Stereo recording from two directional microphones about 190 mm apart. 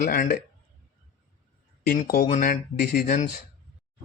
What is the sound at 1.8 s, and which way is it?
A man's voice, 50° left (ahead or behind).